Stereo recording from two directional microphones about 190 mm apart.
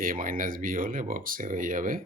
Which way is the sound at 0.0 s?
45° right (ahead or behind).